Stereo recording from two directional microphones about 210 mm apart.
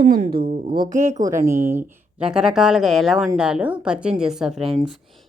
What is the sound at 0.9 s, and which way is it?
Speech, 35° right (ahead or behind).